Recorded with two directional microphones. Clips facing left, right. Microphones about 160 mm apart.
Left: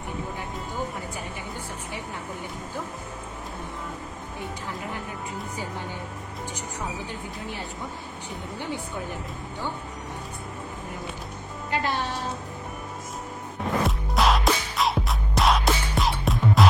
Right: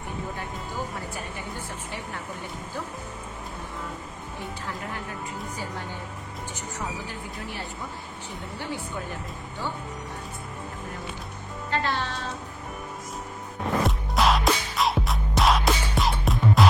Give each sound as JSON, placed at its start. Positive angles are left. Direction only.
{"t": 11.7, "sound": "speech", "side_deg": 15}
{"t": 13.8, "sound": "music", "side_deg": 0}